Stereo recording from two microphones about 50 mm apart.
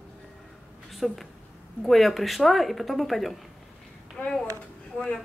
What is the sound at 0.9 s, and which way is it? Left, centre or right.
Speech, centre.